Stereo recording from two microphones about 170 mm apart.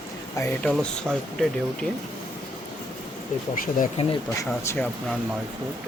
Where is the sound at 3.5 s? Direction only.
55° left (ahead or behind).